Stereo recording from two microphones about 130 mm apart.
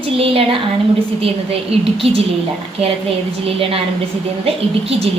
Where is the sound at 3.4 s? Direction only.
45° right (ahead or behind).